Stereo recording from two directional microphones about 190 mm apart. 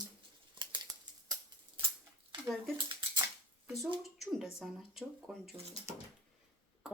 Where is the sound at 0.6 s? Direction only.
25° right (ahead or behind).